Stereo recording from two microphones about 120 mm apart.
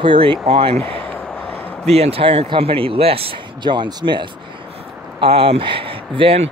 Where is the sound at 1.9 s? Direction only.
55° right (ahead or behind); by 4.3 s 40° right (ahead or behind).